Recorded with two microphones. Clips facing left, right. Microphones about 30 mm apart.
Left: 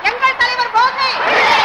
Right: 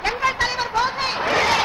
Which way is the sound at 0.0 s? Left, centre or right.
Left.